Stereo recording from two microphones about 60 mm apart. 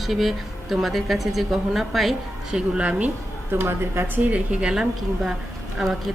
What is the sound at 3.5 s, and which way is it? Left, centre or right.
Speech, right.